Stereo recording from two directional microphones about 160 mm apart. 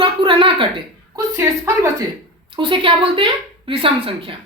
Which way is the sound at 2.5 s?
30° right (ahead or behind).